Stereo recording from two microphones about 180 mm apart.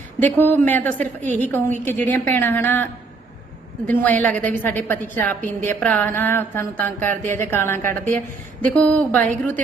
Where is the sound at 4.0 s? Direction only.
10° left (ahead or behind).